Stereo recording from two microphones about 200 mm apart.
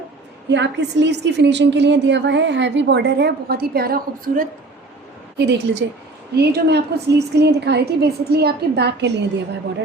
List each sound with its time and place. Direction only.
0.5 s a woman's voice: 60° right (ahead or behind)
5.4 s a woman's voice: 60° right (ahead or behind)